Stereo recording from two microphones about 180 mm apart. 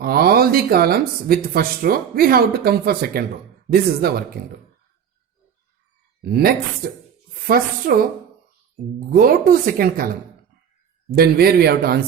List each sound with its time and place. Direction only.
0.0 s speech: 60° right (ahead or behind)
6.2 s speech: 60° right (ahead or behind)
9.0 s speech: 50° right (ahead or behind)
11.1 s speech: 60° right (ahead or behind)